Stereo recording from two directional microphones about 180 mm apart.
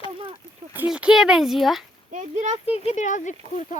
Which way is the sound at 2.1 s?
40° right (ahead or behind).